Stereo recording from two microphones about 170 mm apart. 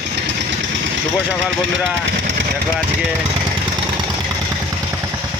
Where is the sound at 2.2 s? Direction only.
55° right (ahead or behind).